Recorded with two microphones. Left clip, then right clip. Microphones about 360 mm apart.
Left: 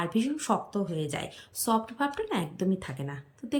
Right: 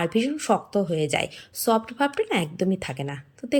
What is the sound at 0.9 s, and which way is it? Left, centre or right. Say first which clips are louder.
Speech: right 9 dB; left.